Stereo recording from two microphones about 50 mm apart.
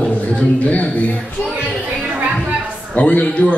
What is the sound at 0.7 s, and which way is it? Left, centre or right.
Speech, left.